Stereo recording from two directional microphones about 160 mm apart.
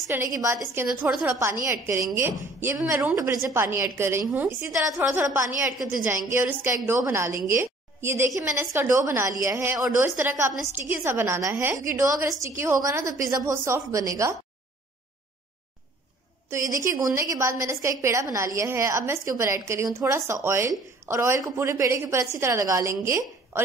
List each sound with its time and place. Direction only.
0.0 s a woman's voice: 15° right (ahead or behind)
16.4 s a woman's voice: 20° right (ahead or behind)